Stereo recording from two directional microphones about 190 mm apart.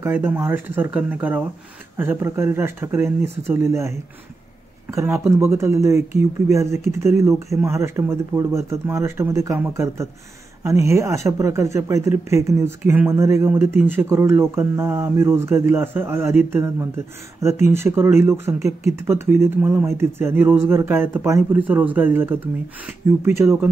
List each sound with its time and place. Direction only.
0.0 s speech: 10° right (ahead or behind)
4.9 s speech: 15° right (ahead or behind)